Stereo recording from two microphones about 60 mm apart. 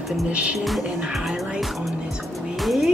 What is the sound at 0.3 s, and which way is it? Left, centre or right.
Speech, right.